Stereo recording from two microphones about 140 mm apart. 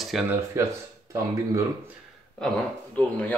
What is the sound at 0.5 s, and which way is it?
Speech, 20° right (ahead or behind).